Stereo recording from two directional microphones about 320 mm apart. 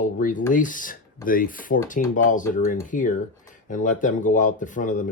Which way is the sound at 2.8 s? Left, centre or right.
Left.